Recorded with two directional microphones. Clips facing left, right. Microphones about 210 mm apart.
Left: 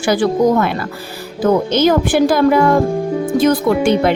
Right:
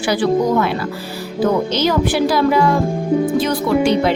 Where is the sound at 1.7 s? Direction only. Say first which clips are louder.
Left 4 dB; 50° left (ahead or behind).